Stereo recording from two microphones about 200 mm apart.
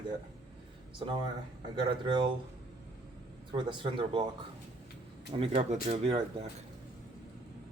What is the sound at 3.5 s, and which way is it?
Speech, 25° right (ahead or behind).